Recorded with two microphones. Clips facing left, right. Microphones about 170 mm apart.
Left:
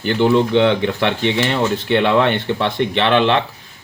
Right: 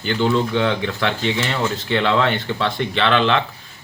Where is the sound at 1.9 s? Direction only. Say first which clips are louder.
Left 3 dB; 20° left (ahead or behind).